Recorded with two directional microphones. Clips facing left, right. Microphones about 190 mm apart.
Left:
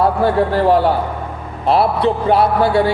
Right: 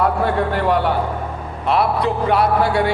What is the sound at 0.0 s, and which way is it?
A man's voice, 30° left (ahead or behind).